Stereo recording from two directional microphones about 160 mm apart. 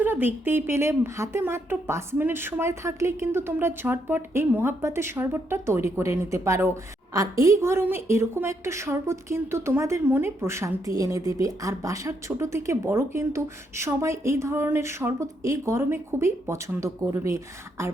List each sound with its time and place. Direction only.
0.0 s a woman's voice: 10° right (ahead or behind)